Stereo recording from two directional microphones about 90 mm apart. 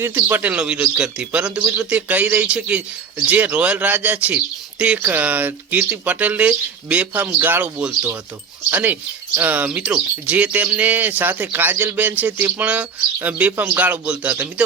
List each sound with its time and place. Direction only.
0.0 s speech: 25° right (ahead or behind)